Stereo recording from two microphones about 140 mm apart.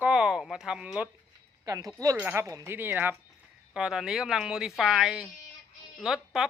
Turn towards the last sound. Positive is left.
turn(degrees=-5)  # may be behind; listen again after turning